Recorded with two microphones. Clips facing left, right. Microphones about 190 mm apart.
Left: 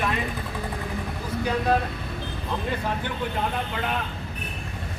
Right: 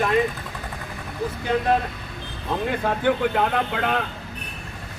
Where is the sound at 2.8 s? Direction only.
65° right (ahead or behind).